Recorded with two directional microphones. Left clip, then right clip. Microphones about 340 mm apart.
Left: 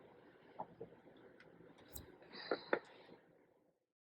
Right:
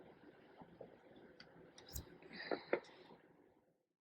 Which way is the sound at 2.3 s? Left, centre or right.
Centre.